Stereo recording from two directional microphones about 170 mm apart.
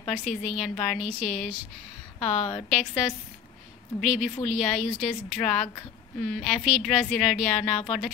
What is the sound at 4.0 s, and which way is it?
Speech, centre (ahead or behind).